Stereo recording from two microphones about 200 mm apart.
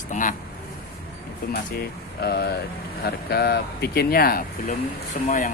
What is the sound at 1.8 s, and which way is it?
Speech, 50° left (ahead or behind).